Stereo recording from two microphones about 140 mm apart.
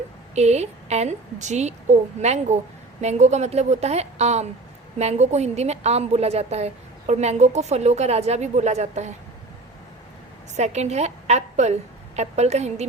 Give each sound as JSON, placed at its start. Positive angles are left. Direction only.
{"t": 0.3, "sound": "a woman's voice", "side_deg": -55}
{"t": 10.6, "sound": "a woman's voice", "side_deg": -50}